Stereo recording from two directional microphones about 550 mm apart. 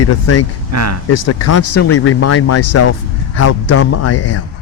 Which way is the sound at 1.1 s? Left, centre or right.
Left.